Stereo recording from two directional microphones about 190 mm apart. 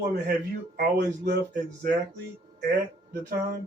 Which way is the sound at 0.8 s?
60° right (ahead or behind).